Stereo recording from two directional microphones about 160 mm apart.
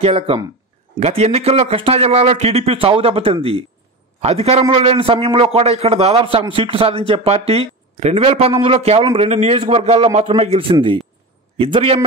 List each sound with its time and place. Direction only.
0.0 s a man's voice: 40° right (ahead or behind)